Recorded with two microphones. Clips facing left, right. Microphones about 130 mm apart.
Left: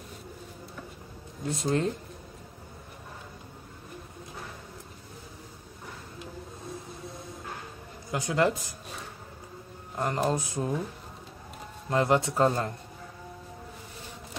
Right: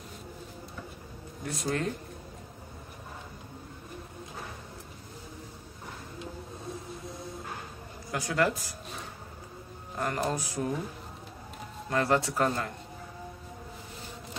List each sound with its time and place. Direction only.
1.4 s speech: 25° left (ahead or behind)
8.1 s speech: 20° left (ahead or behind)
9.9 s speech: 20° left (ahead or behind)
11.9 s speech: 20° left (ahead or behind)